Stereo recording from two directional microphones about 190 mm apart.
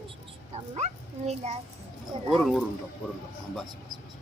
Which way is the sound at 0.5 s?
35° right (ahead or behind).